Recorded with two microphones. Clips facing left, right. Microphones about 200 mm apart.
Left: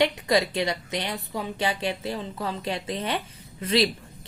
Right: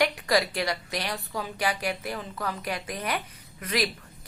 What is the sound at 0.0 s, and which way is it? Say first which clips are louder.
A woman's voice: left 2 dB; 20° left (ahead or behind).